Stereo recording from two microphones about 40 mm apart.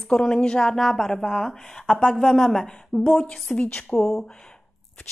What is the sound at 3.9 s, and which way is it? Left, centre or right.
Speech, centre.